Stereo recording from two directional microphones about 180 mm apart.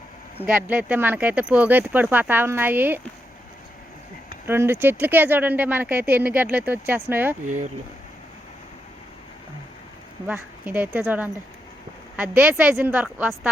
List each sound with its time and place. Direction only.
0.4 s speech: 10° right (ahead or behind)
4.4 s speech: 15° right (ahead or behind)
10.2 s speech: 10° right (ahead or behind)